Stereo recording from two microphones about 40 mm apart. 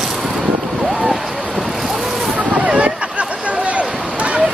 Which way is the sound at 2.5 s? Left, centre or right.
Right.